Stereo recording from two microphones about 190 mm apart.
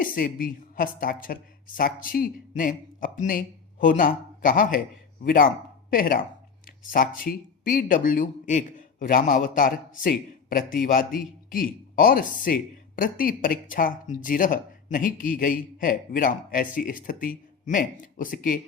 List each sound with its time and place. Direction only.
0.0 s speech: 45° left (ahead or behind)
5.9 s a man's voice: 50° left (ahead or behind)